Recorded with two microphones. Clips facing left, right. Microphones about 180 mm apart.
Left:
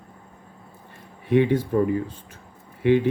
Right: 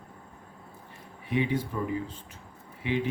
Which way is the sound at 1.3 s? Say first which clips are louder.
Left 9 dB; 60° left (ahead or behind).